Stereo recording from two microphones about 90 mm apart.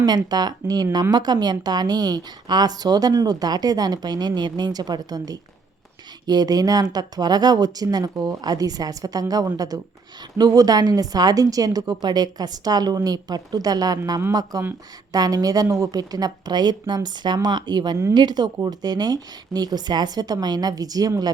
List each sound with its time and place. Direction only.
0.0 s a woman's voice: 50° right (ahead or behind)